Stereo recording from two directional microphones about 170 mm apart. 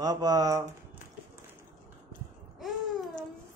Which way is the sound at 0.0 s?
20° right (ahead or behind).